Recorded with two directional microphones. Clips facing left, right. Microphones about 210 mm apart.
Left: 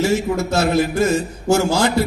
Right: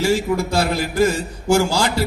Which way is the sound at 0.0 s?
20° left (ahead or behind).